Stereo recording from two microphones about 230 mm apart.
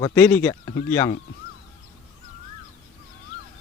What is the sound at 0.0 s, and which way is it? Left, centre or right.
Speech, centre.